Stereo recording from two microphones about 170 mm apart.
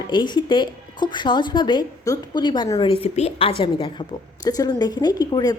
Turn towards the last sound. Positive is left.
turn(degrees=25)  # may be behind; listen again after turning